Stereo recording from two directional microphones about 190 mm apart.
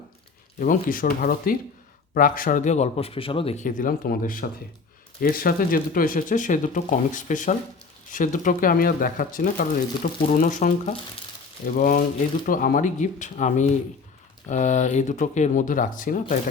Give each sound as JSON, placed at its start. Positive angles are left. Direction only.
{"t": 0.6, "sound": "speech", "side_deg": 45}